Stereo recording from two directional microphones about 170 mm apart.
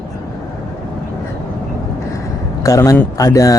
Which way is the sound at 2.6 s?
20° left (ahead or behind).